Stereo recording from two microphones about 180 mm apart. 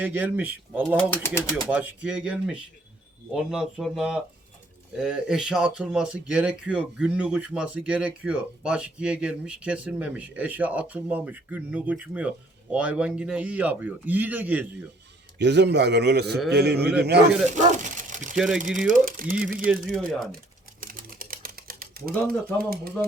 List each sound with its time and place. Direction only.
0.0 s speech: 10° right (ahead or behind)
15.4 s a man's voice: 75° right (ahead or behind)
17.8 s a sound: 45° right (ahead or behind)
18.3 s speech: centre (ahead or behind)
18.9 s speech: 50° right (ahead or behind)
19.6 s speech: 5° right (ahead or behind)
20.8 s typing: 50° right (ahead or behind)
22.7 s a man's voice: 55° right (ahead or behind)